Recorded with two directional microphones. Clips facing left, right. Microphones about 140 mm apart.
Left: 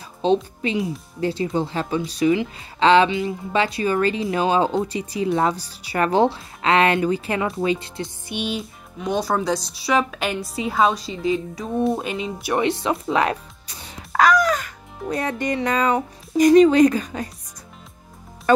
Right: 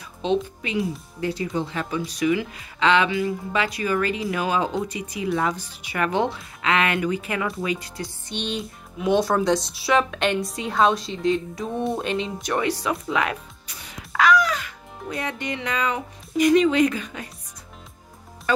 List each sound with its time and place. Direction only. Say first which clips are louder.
0.2 s speech: left 4 dB; 35° left (ahead or behind)
8.3 s speech: left 2 dB; 5° left (ahead or behind)
12.5 s music: left 3 dB; 25° left (ahead or behind); by 15.1 s 45° left (ahead or behind)
15.2 s speech: left 7 dB; 45° left (ahead or behind)